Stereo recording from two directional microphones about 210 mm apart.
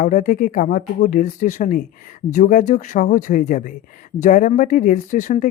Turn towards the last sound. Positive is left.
turn(degrees=35)  # may be behind; listen again after turning